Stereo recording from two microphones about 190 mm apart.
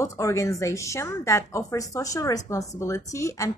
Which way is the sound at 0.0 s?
15° left (ahead or behind).